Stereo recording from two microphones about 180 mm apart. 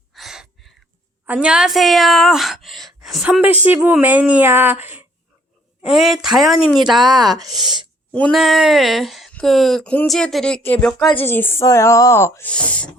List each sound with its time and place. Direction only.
0.1 s a sound: centre (ahead or behind)
1.3 s a woman's voice: 5° right (ahead or behind)
7.4 s speech: 20° right (ahead or behind)
8.1 s speech: 5° left (ahead or behind)